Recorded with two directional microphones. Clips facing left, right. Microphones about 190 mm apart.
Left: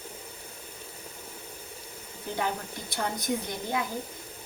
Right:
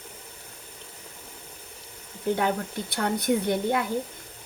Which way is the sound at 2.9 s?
65° right (ahead or behind).